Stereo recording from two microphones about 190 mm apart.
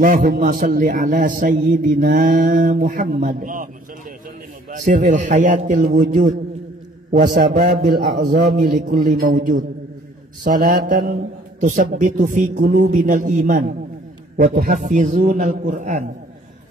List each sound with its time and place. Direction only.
0.0 s a man's voice: 45° right (ahead or behind)
4.6 s a man's voice: 40° right (ahead or behind)